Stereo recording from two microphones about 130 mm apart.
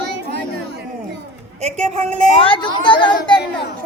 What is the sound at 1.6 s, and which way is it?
Speech, 60° right (ahead or behind).